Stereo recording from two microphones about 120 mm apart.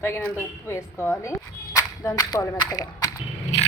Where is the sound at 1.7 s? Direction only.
25° left (ahead or behind).